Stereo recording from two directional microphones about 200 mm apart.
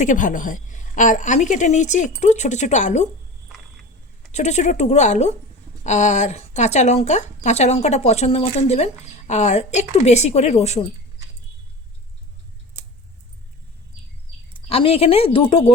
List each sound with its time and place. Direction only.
0.0 s speech: 40° left (ahead or behind)
4.3 s speech: 35° left (ahead or behind)
14.7 s speech: 30° left (ahead or behind)